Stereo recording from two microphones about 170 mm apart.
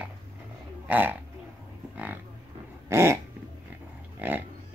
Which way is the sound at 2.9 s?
15° right (ahead or behind).